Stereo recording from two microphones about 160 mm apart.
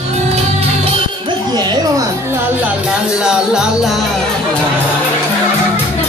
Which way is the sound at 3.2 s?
5° right (ahead or behind).